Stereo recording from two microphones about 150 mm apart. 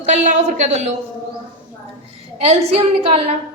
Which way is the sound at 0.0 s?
50° right (ahead or behind).